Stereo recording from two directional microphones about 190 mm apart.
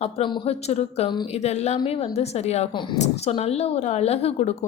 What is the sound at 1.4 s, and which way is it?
A woman's voice, 35° left (ahead or behind).